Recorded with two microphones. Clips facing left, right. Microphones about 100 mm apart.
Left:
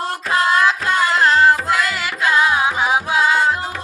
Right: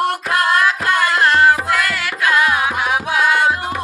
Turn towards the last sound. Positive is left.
turn(degrees=20)  # may be behind; listen again after turning